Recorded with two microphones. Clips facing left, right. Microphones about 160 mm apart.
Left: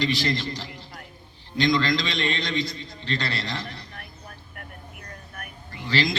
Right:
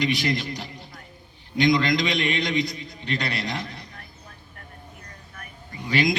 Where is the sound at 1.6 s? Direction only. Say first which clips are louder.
Right 2 dB; 20° right (ahead or behind).